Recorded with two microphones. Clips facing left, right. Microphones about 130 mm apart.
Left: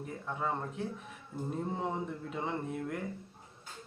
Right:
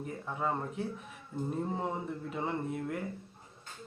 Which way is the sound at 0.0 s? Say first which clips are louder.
Right 1 dB; centre (ahead or behind).